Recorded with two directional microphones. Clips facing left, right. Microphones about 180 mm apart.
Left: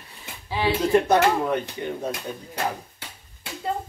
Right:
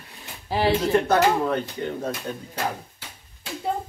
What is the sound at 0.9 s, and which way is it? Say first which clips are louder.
Speech: left 3 dB; 15° left (ahead or behind).